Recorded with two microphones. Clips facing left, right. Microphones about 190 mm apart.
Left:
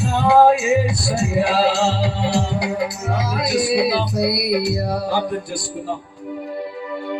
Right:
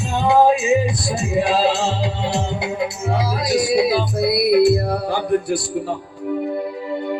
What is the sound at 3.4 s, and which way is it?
Music, 40° right (ahead or behind).